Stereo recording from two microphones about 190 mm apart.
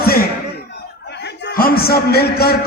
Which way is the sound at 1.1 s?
65° left (ahead or behind).